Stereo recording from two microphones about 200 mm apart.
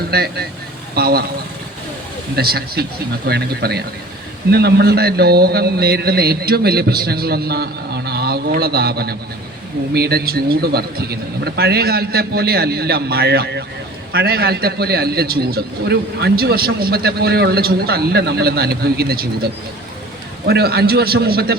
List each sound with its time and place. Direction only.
0.1 s a man's voice: 50° right (ahead or behind)
2.3 s a man's voice: 50° right (ahead or behind)
20.5 s a man's voice: 55° right (ahead or behind)